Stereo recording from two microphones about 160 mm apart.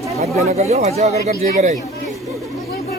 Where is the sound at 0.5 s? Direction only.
45° right (ahead or behind).